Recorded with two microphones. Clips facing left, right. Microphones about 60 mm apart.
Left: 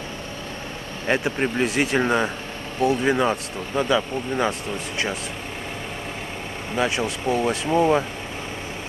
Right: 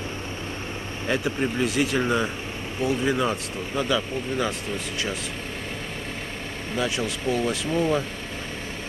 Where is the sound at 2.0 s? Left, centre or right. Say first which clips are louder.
Left 3 dB; left.